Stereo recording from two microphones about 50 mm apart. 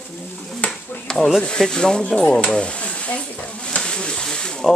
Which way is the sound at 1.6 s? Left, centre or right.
Centre.